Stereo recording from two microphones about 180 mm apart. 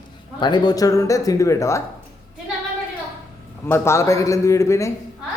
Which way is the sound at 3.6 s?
15° left (ahead or behind).